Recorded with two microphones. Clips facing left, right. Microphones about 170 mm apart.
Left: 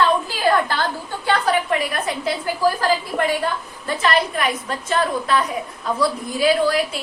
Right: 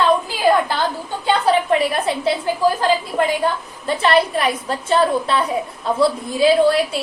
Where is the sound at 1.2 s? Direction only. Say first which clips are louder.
Right 3 dB; 25° right (ahead or behind).